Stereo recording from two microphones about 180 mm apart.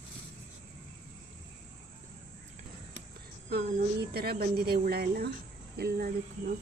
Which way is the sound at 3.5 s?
60° right (ahead or behind).